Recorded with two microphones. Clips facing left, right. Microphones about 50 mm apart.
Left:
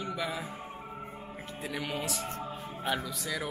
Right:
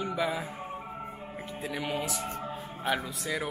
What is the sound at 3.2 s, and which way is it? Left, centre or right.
Speech, centre.